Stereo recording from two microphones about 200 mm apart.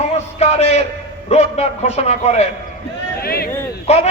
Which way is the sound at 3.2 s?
50° left (ahead or behind).